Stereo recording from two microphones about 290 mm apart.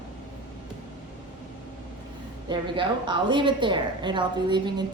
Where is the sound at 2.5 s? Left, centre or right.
Centre.